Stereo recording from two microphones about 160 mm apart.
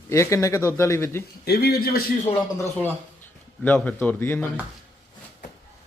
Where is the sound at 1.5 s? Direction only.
80° left.